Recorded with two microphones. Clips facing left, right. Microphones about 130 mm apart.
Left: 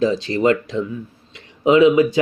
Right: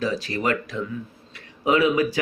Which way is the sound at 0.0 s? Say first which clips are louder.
Left 8 dB; 25° left (ahead or behind).